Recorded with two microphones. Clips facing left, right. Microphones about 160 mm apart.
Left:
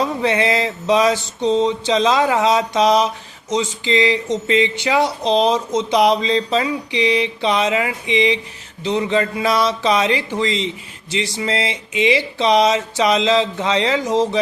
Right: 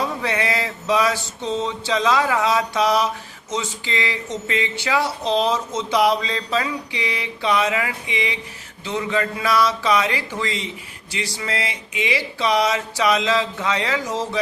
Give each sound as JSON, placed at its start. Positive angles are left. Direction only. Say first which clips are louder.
{"t": 0.2, "sound": "speech", "louder": "left 6 dB", "side_deg": 20}